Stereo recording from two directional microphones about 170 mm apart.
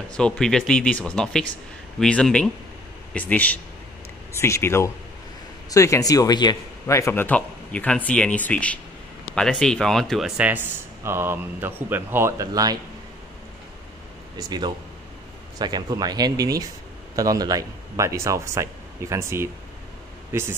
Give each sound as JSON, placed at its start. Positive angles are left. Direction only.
{"t": 0.1, "sound": "a man's voice", "side_deg": 5}
{"t": 15.6, "sound": "speech", "side_deg": -25}